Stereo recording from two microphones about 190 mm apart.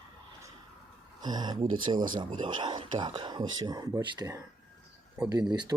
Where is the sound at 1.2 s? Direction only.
20° right (ahead or behind).